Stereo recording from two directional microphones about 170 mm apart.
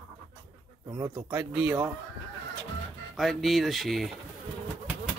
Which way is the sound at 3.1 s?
Centre (ahead or behind).